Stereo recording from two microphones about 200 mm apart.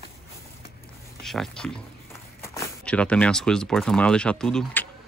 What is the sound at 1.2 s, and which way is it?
Speech, centre (ahead or behind).